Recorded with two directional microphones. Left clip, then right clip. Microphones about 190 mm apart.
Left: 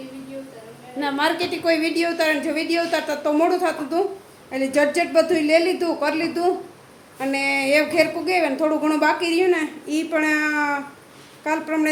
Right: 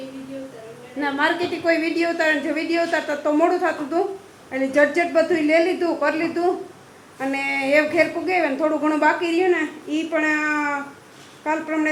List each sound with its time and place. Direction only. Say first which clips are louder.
0.9 s a woman's voice: even; 5° left (ahead or behind)